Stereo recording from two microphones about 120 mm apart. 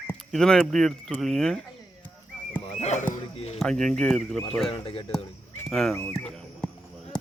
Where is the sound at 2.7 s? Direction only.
65° left (ahead or behind).